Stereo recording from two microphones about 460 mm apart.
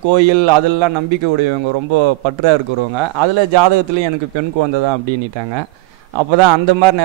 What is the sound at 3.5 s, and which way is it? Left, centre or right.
Speech, right.